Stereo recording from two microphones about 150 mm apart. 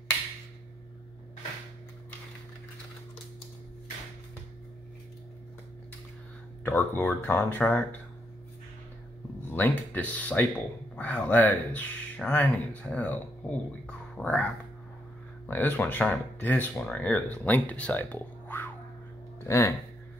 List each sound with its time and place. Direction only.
6.6 s speech: 15° left (ahead or behind)
9.5 s speech: 10° left (ahead or behind)